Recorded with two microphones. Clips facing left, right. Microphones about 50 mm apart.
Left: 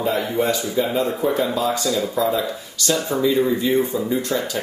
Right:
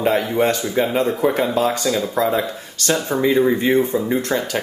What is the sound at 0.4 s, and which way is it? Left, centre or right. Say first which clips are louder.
Speech: right 2 dB; right.